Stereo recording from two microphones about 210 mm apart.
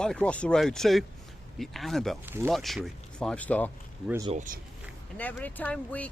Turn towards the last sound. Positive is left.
turn(degrees=5)  # may be behind; listen again after turning